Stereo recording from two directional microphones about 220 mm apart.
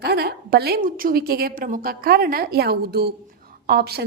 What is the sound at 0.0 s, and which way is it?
A woman's voice, 45° right (ahead or behind).